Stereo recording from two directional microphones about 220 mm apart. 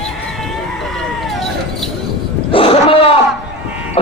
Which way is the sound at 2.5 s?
25° left (ahead or behind).